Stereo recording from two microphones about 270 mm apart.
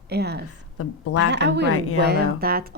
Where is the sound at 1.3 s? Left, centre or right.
Right.